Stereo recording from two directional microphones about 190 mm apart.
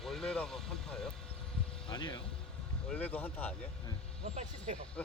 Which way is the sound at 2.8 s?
10° left (ahead or behind).